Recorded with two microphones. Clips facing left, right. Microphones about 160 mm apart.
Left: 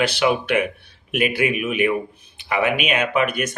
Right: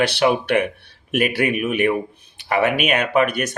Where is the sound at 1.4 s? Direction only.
40° right (ahead or behind).